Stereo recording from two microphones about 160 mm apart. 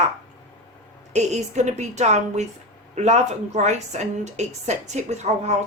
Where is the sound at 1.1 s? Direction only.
45° right (ahead or behind).